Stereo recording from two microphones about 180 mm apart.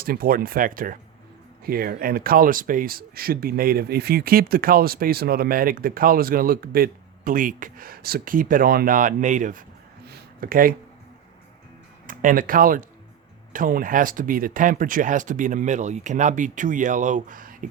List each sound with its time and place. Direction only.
0.0 s speech: 55° right (ahead or behind)
10.1 s a sound: 50° right (ahead or behind)
12.0 s speech: 50° right (ahead or behind)